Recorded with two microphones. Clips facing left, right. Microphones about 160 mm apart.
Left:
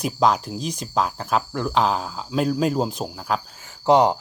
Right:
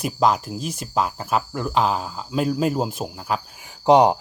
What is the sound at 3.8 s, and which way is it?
Speech, 15° right (ahead or behind).